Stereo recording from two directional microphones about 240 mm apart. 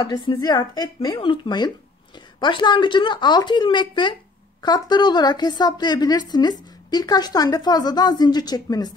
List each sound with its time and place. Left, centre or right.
0.0 s a woman's voice: centre